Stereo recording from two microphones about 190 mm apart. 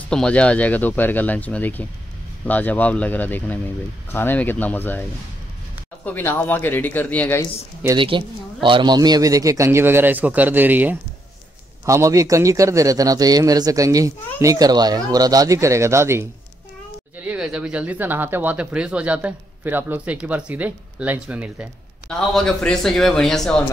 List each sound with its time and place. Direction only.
0.1 s speech: 5° left (ahead or behind)
6.0 s speech: 10° left (ahead or behind)
7.8 s a man's voice: 25° right (ahead or behind)
17.3 s a man's voice: 5° right (ahead or behind)